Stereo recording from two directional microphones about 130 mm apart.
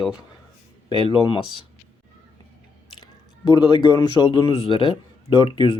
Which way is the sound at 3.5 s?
35° left (ahead or behind).